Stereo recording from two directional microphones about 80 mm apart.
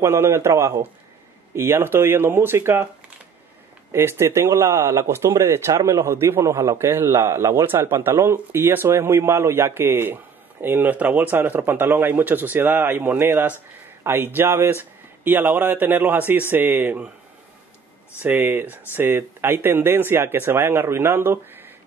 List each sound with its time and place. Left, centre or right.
0.0 s speech: right
3.9 s speech: right
18.2 s speech: right